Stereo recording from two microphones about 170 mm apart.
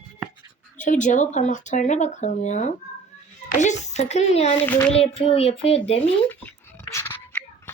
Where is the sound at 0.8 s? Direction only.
50° left (ahead or behind).